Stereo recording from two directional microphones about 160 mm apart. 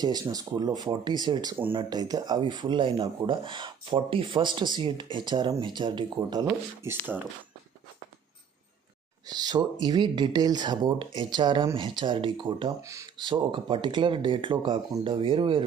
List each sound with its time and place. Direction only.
0.0 s speech: 25° right (ahead or behind)
6.8 s speech: 15° right (ahead or behind)
9.3 s speech: 25° right (ahead or behind)
12.8 s speech: 20° right (ahead or behind)
13.3 s speech: 30° right (ahead or behind)